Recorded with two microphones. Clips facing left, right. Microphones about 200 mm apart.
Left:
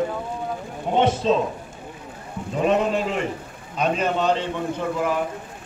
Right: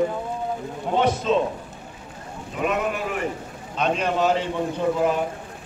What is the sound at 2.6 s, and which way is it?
Speech, 30° left (ahead or behind).